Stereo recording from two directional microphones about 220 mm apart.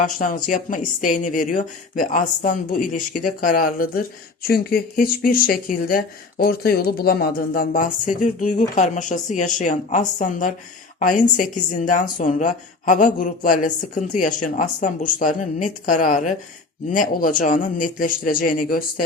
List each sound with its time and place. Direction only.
0.0 s speech: 35° left (ahead or behind)